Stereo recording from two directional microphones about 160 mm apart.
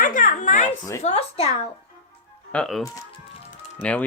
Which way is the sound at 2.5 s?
5° left (ahead or behind).